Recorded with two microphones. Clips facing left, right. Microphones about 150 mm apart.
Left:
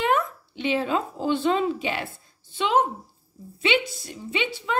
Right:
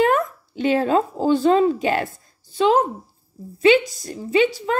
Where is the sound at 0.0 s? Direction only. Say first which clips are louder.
Right 5 dB; 45° right (ahead or behind).